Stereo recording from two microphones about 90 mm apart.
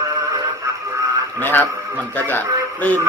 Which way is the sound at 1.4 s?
20° left (ahead or behind).